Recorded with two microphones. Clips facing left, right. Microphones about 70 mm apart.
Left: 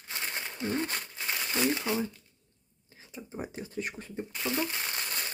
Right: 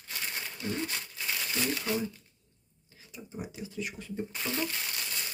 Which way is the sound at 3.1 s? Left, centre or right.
Left.